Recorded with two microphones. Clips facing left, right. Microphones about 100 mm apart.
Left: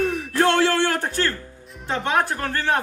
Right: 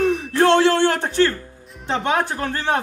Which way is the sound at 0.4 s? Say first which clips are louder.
Right 4 dB; 25° right (ahead or behind).